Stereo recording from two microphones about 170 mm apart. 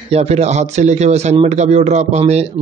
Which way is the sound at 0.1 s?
40° right (ahead or behind).